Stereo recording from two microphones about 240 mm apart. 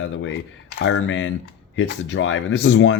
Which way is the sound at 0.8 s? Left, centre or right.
Left.